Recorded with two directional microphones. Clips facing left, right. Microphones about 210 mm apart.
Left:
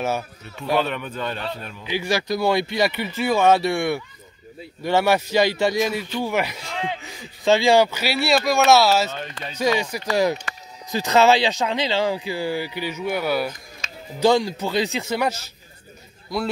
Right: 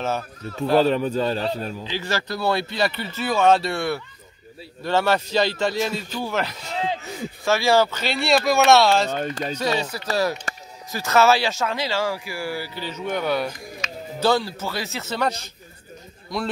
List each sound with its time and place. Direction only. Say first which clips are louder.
0.0 s speech: left 1 dB; 10° left (ahead or behind)
0.7 s a man's voice: right 6 dB; 35° right (ahead or behind)
1.9 s speech: left 7 dB; 15° left (ahead or behind)
9.1 s speech: right 7 dB; 45° right (ahead or behind)
9.8 s speech: left 2 dB; 10° left (ahead or behind)